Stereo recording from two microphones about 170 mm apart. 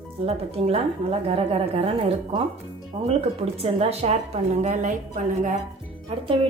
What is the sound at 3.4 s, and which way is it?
A woman's voice, 35° right (ahead or behind).